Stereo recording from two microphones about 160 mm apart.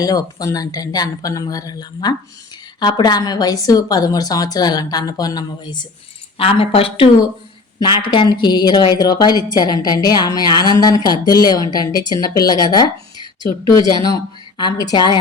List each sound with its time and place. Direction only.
0.0 s a woman's voice: 25° left (ahead or behind)
14.6 s a woman's voice: 25° left (ahead or behind)